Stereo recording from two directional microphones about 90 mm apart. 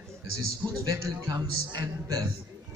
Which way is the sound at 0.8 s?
40° right (ahead or behind).